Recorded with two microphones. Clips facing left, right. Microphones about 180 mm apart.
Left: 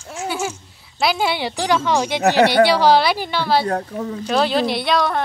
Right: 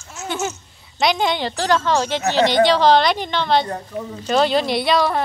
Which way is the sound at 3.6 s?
70° left (ahead or behind).